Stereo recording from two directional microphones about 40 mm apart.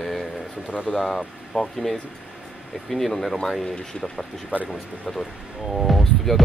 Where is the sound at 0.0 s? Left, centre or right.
Centre.